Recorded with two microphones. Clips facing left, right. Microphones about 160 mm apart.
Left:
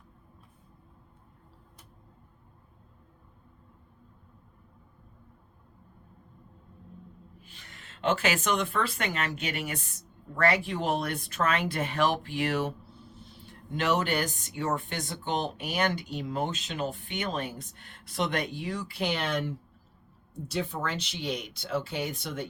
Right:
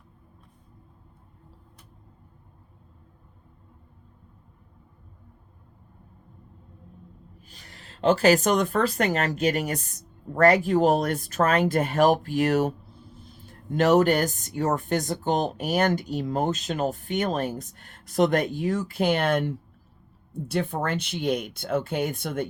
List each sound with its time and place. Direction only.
7.4 s speech: 40° right (ahead or behind)